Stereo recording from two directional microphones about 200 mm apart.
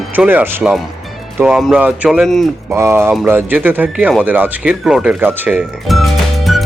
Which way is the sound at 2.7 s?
15° right (ahead or behind).